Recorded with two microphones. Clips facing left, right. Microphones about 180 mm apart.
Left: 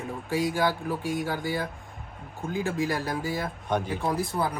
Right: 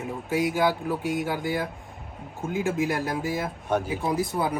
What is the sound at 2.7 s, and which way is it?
Speech, 20° right (ahead or behind).